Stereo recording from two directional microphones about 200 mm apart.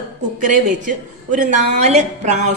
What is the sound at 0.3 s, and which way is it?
A woman's voice, 40° right (ahead or behind).